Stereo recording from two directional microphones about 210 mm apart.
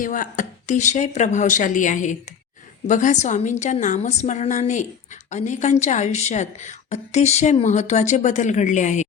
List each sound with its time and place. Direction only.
0.0 s a woman's voice: 40° left (ahead or behind)